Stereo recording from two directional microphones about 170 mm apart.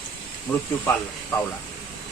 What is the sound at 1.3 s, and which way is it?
Speech, 20° left (ahead or behind).